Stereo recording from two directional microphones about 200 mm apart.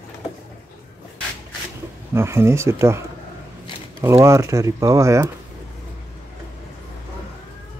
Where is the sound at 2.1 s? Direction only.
15° right (ahead or behind).